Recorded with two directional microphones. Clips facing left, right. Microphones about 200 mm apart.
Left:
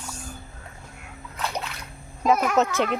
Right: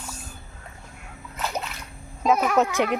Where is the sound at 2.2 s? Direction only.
Centre (ahead or behind).